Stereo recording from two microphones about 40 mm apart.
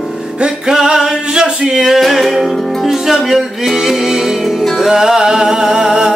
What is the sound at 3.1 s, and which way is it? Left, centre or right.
Music, centre.